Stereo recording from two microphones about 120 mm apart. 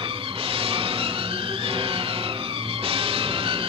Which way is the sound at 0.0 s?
50° right (ahead or behind).